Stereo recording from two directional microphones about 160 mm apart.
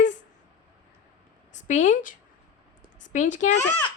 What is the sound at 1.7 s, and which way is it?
Speech, 55° left (ahead or behind).